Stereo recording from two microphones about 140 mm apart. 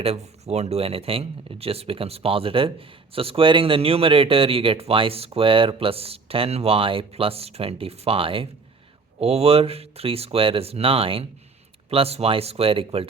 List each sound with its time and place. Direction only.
0.0 s speech: 50° right (ahead or behind)